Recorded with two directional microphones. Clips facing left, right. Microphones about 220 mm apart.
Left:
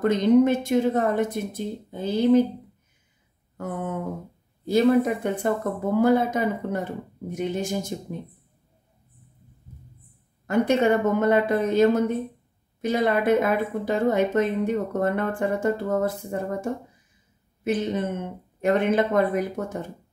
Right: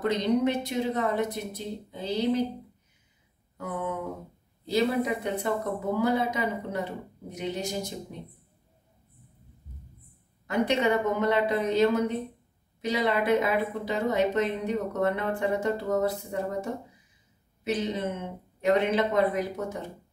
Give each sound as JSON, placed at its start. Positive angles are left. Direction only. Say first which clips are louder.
{"t": 0.0, "sound": "speech", "louder": "left 7 dB", "side_deg": 50}
{"t": 3.5, "sound": "a sound", "louder": "left 2 dB", "side_deg": 50}
{"t": 4.6, "sound": "speech", "louder": "left 6 dB", "side_deg": 50}
{"t": 10.4, "sound": "speech", "louder": "left 5 dB", "side_deg": 50}
{"t": 17.6, "sound": "speech", "louder": "left 4 dB", "side_deg": 50}